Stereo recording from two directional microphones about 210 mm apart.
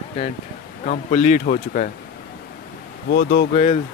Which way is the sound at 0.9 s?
35° left (ahead or behind).